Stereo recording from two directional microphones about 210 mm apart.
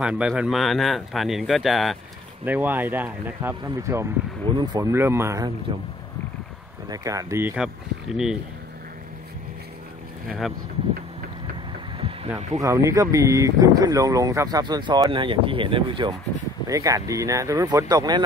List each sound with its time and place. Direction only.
0.0 s speech: 5° right (ahead or behind)
5.7 s speech: 25° right (ahead or behind)
6.9 s speech: 15° right (ahead or behind)
10.2 s speech: centre (ahead or behind)
12.5 s speech: 15° right (ahead or behind)